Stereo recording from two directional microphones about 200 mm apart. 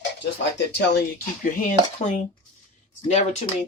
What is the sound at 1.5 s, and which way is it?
Speech, 40° left (ahead or behind).